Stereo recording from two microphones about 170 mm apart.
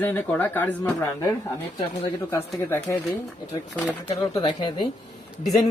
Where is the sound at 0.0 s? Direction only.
10° left (ahead or behind).